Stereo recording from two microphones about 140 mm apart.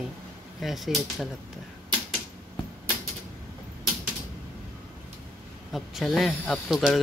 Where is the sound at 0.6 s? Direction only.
Centre (ahead or behind).